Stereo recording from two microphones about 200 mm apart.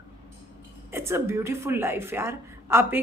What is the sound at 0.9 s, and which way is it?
A woman's voice, 15° right (ahead or behind).